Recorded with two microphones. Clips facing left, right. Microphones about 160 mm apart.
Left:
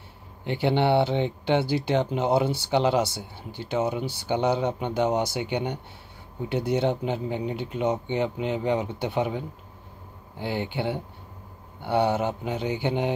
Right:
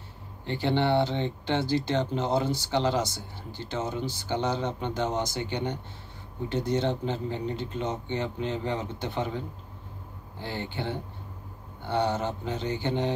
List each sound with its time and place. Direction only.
0.5 s speech: 15° left (ahead or behind)
10.4 s speech: 15° left (ahead or behind)